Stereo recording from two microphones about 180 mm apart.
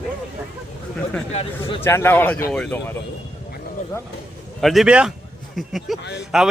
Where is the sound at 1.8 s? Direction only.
15° left (ahead or behind).